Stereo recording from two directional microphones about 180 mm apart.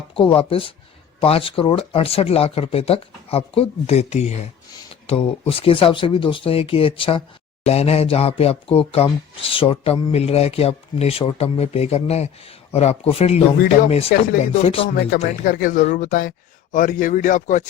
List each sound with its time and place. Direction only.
0.1 s speech: 30° left (ahead or behind)
13.6 s speech: 45° left (ahead or behind)
14.6 s speech: 35° left (ahead or behind)
15.2 s speech: 50° left (ahead or behind)